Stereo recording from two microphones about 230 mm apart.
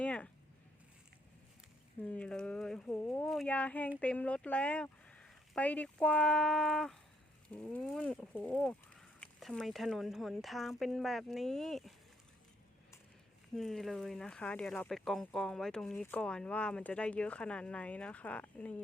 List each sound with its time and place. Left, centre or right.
0.0 s a sound: centre
2.0 s speech: centre
13.6 s speech: centre